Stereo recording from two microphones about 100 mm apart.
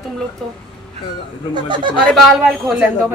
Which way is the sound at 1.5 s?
50° right (ahead or behind).